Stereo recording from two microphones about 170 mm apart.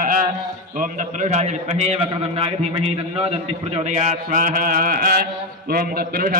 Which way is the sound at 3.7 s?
40° right (ahead or behind).